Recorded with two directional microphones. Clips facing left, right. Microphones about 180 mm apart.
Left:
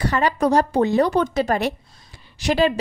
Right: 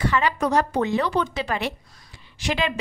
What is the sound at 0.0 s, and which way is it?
A woman's voice, 40° left (ahead or behind).